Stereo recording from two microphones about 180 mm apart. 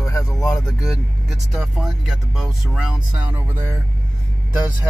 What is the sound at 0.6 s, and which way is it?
Speech, centre (ahead or behind).